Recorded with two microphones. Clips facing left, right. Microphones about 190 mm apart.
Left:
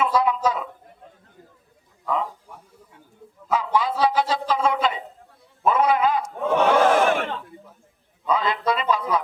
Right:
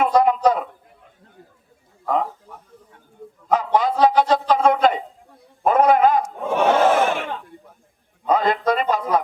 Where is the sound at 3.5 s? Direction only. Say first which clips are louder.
Right 3 dB; 50° right (ahead or behind).